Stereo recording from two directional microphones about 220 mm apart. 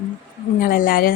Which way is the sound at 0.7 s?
40° left (ahead or behind).